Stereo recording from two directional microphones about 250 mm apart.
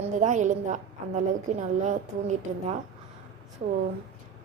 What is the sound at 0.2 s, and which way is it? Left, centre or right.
A woman's voice, right.